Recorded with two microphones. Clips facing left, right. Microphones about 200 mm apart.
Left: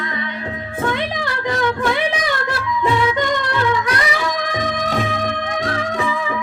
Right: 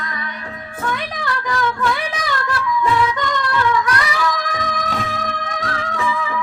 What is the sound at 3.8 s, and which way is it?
Music, 20° left (ahead or behind).